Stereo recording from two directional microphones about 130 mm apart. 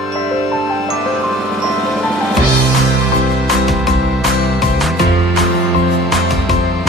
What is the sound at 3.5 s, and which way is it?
Music, centre (ahead or behind).